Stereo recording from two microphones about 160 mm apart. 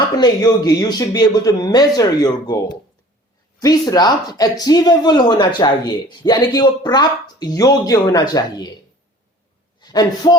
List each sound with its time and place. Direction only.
0.2 s speech: 25° left (ahead or behind)
3.6 s speech: 25° left (ahead or behind)
9.8 s a man's voice: 25° left (ahead or behind)